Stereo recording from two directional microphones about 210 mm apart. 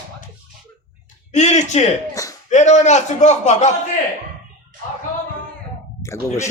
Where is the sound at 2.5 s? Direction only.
35° left (ahead or behind).